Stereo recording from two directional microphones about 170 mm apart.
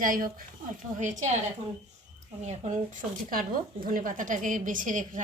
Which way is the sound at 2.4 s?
45° right (ahead or behind).